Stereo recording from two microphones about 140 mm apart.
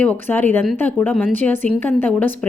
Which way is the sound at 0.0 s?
10° left (ahead or behind).